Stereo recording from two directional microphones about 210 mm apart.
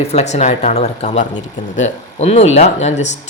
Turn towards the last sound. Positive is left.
turn(degrees=35)  # may be behind; listen again after turning